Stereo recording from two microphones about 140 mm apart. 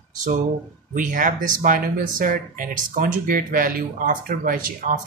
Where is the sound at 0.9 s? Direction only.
70° right (ahead or behind).